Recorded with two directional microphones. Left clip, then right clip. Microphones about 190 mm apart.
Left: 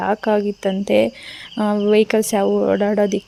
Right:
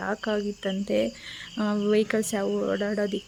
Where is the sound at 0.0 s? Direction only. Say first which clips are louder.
Left 10 dB; 30° left (ahead or behind).